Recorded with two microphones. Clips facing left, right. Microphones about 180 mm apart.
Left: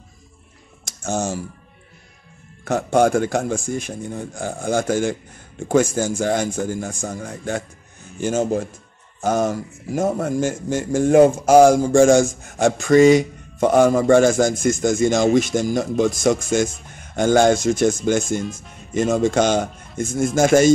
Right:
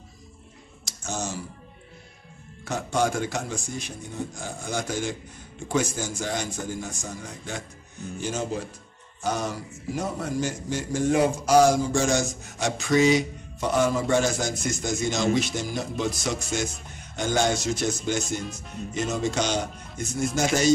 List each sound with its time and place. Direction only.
0.8 s speech: 50° left (ahead or behind)
2.6 s speech: 55° left (ahead or behind)
18.4 s speech: centre (ahead or behind)
18.9 s speech: 50° left (ahead or behind)